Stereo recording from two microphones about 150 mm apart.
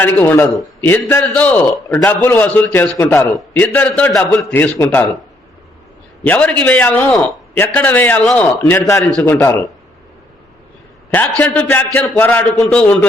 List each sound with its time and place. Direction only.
0.0 s a man's voice: 10° left (ahead or behind)
6.2 s a man's voice: 10° left (ahead or behind)
9.2 s a man's voice: 20° left (ahead or behind)
11.1 s a man's voice: 10° left (ahead or behind)